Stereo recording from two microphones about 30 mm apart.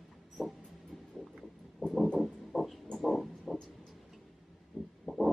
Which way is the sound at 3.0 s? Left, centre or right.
Centre.